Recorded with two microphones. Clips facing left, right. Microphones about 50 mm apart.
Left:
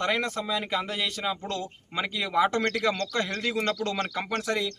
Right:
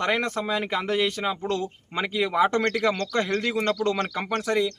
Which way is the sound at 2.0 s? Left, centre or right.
Centre.